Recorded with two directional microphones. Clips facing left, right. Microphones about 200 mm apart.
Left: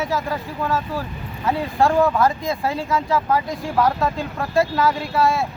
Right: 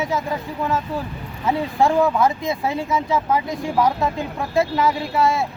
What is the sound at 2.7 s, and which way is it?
Speech, 20° right (ahead or behind).